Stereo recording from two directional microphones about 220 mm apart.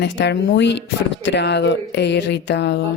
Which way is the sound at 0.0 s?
50° left (ahead or behind).